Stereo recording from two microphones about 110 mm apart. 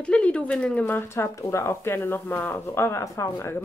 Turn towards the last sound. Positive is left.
turn(degrees=20)  # may be behind; listen again after turning